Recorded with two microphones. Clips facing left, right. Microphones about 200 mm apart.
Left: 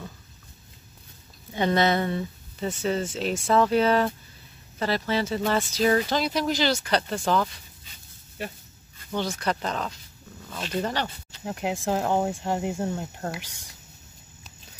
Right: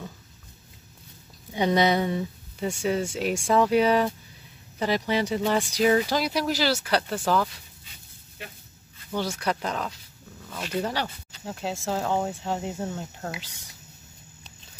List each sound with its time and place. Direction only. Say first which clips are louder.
1.5 s speech: right 1 dB; 15° right (ahead or behind)
9.1 s speech: even; 10° right (ahead or behind)
11.4 s speech: left 3 dB; 15° left (ahead or behind)